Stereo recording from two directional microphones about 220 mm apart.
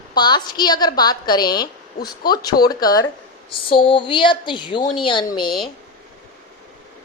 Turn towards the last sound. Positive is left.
turn(degrees=20)  # may be behind; listen again after turning